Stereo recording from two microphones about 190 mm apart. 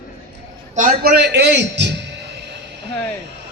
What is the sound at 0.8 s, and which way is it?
A man's voice, 50° right (ahead or behind).